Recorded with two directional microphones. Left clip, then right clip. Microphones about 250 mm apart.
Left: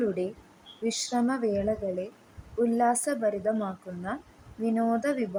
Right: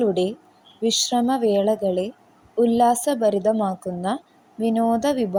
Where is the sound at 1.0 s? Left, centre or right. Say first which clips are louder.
Right 5 dB; centre.